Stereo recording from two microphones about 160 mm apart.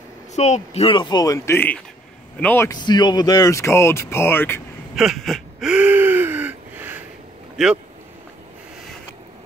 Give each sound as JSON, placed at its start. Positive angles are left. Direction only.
{"t": 0.4, "sound": "speech", "side_deg": 40}
{"t": 2.7, "sound": "speech", "side_deg": 25}
{"t": 4.9, "sound": "gasp", "side_deg": 0}
{"t": 7.5, "sound": "speech", "side_deg": -5}